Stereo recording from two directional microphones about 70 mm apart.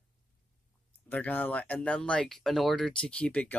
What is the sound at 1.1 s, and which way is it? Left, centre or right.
Speech, left.